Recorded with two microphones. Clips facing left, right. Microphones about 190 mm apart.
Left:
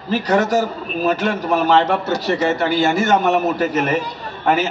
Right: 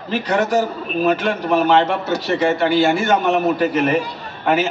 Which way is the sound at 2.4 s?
40° left (ahead or behind).